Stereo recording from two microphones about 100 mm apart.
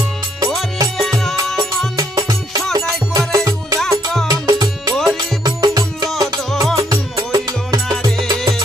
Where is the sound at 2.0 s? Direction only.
40° right (ahead or behind).